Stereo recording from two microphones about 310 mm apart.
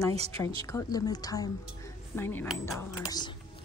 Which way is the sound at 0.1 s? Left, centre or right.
Centre.